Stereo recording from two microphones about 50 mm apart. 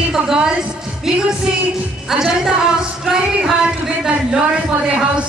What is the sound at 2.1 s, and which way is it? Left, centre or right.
A woman's voice, centre.